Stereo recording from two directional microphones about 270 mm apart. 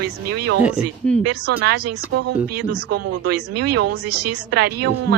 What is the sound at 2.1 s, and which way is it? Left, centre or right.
Speech, right.